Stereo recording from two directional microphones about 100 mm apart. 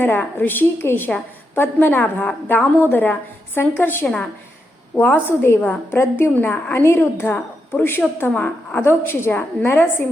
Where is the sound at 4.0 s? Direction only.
10° left (ahead or behind).